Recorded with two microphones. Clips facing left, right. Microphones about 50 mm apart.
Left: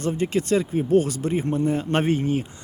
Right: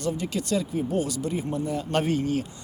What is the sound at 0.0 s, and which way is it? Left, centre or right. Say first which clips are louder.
Speech: left 5 dB; left.